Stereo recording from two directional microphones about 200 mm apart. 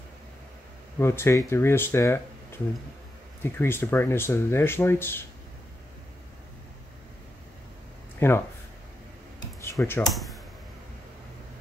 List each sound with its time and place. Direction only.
0.9 s speech: 10° left (ahead or behind)
8.2 s speech: 10° left (ahead or behind)
9.7 s speech: 15° left (ahead or behind)
10.1 s computer keyboard: centre (ahead or behind)